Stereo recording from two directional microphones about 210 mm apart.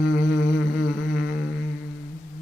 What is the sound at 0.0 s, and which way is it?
Humming, 60° left (ahead or behind).